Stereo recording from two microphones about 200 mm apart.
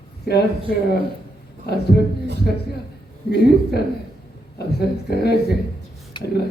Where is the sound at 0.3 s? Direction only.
50° left (ahead or behind).